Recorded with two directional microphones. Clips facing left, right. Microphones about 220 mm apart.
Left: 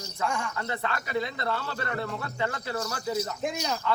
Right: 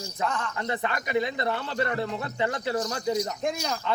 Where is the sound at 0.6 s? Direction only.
20° right (ahead or behind).